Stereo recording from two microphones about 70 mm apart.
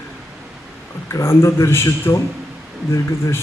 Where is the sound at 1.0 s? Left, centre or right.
Left.